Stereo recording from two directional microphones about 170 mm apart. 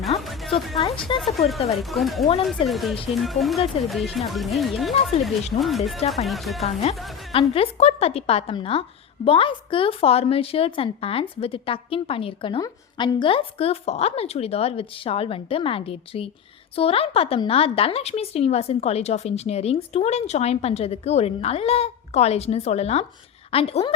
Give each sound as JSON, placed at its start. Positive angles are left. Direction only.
{"t": 0.2, "sound": "music", "side_deg": 0}
{"t": 0.8, "sound": "a woman's voice", "side_deg": 30}
{"t": 1.2, "sound": "speech", "side_deg": 0}
{"t": 7.3, "sound": "a woman's voice", "side_deg": 35}